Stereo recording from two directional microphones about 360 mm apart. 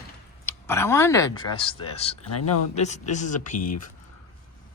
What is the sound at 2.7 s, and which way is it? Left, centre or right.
Speech, centre.